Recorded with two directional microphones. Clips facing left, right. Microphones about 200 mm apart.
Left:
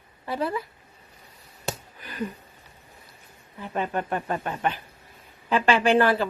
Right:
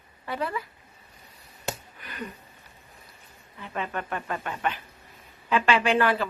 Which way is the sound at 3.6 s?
35° left (ahead or behind).